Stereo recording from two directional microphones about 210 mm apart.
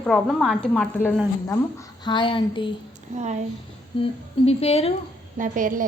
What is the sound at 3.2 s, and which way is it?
Speech, 35° right (ahead or behind).